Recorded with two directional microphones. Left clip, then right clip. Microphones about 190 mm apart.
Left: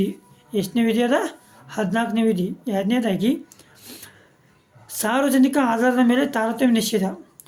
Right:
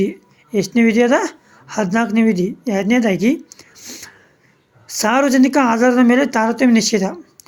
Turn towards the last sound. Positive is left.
turn(degrees=-30)  # may be behind; listen again after turning